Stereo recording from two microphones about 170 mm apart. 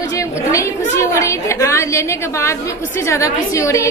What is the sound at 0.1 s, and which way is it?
A woman's voice, 20° left (ahead or behind).